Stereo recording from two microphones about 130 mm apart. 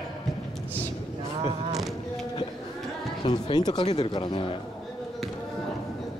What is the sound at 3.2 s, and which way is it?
Speech, 35° left (ahead or behind).